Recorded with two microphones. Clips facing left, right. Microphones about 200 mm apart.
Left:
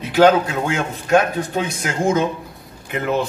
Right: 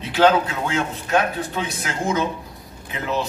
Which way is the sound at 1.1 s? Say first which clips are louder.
Left 5 dB; 45° left (ahead or behind).